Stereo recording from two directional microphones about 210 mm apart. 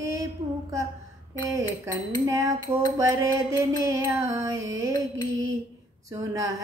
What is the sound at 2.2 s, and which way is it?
Music, 15° right (ahead or behind).